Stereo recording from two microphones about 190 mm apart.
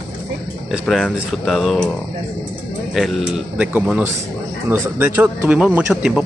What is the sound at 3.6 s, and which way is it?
A man's voice, 5° right (ahead or behind).